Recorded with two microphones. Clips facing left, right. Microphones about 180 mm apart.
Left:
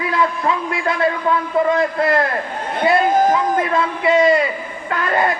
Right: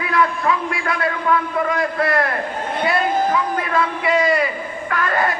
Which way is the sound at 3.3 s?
25° left (ahead or behind).